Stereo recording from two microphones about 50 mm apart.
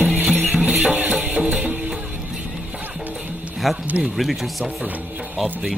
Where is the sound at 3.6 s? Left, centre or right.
Centre.